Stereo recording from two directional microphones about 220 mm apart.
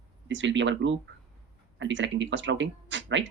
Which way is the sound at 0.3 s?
55° right (ahead or behind).